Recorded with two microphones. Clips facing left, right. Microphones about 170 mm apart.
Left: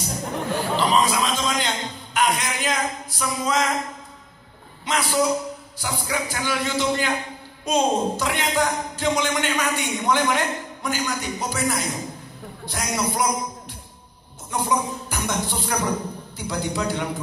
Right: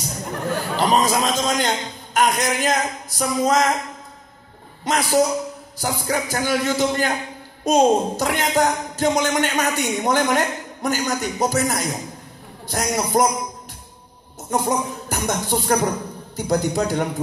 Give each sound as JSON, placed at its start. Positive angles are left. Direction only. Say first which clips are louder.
{"t": 0.7, "sound": "a man's voice", "louder": "right 3 dB", "side_deg": -45}
{"t": 4.8, "sound": "speech", "louder": "right 3 dB", "side_deg": -45}
{"t": 14.5, "sound": "speech", "louder": "right 2 dB", "side_deg": -45}